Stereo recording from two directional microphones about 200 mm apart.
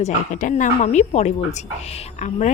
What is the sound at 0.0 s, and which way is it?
Speech, 40° left (ahead or behind).